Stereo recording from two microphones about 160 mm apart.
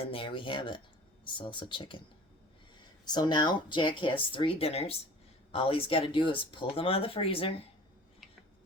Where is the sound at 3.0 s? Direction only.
25° left (ahead or behind).